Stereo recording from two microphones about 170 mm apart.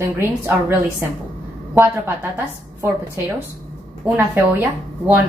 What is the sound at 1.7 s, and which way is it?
Speech, 15° right (ahead or behind).